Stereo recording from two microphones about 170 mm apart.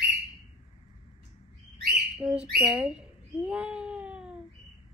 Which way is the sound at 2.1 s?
5° right (ahead or behind).